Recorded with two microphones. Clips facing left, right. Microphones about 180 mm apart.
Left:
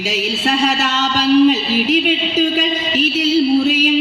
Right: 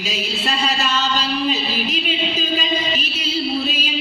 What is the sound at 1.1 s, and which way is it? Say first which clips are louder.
Music: left 10 dB; 80° left.